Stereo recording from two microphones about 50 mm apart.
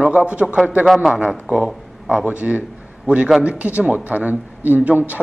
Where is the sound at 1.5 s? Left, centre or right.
Right.